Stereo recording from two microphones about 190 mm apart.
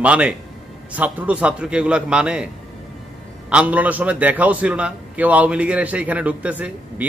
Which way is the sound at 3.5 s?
5° right (ahead or behind).